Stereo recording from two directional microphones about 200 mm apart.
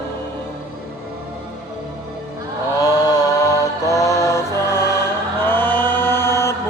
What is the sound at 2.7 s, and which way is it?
Mantra, 20° left (ahead or behind).